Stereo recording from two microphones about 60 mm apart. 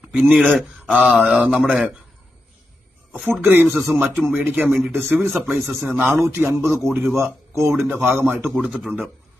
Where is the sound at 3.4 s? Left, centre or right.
Right.